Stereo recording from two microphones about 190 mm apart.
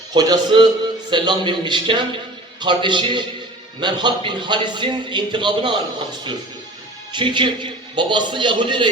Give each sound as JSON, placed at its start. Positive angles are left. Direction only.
{"t": 0.1, "sound": "a man's voice", "side_deg": -20}
{"t": 7.1, "sound": "a man's voice", "side_deg": -25}